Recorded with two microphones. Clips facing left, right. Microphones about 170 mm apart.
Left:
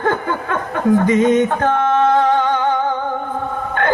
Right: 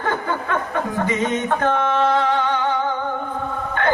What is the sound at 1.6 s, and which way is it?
Music, 50° left (ahead or behind).